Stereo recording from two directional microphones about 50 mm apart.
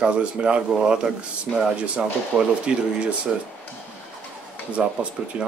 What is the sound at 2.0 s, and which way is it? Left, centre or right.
Speech, centre.